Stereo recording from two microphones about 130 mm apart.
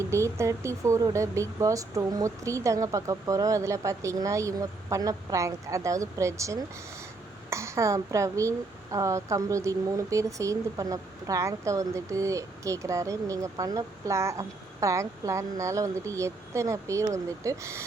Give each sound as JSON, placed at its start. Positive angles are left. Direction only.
{"t": 0.0, "sound": "speech", "side_deg": -20}